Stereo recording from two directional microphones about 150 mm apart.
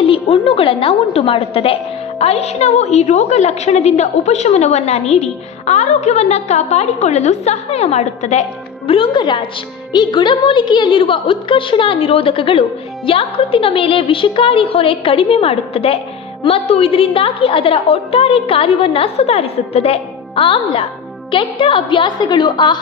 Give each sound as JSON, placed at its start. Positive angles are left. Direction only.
{"t": 0.0, "sound": "a woman's voice", "side_deg": 40}